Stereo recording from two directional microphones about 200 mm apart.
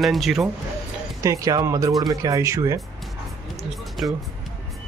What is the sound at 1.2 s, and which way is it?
Speech, 15° right (ahead or behind).